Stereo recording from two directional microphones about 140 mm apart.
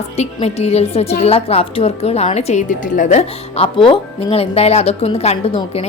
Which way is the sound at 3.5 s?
40° left (ahead or behind).